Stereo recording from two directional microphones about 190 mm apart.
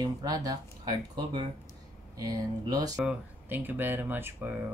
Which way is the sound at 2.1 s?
20° right (ahead or behind).